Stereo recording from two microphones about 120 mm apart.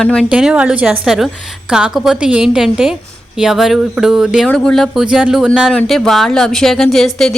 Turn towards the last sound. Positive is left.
turn(degrees=5)  # may be behind; listen again after turning